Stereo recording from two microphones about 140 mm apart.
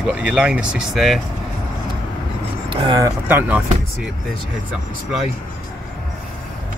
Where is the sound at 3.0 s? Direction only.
15° right (ahead or behind).